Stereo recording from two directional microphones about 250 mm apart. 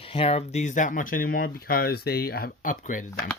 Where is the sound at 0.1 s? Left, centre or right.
Left.